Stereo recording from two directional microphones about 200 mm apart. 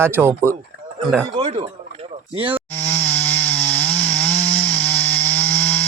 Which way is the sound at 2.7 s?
10° left (ahead or behind).